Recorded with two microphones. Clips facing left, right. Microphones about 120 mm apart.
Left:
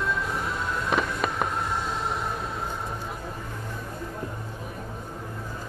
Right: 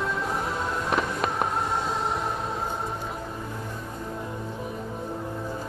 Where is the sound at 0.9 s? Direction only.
20° right (ahead or behind).